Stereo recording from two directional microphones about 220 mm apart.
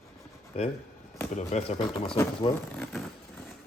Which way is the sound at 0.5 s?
25° left (ahead or behind).